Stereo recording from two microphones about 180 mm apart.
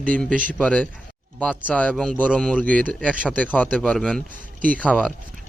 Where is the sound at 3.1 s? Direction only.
5° right (ahead or behind).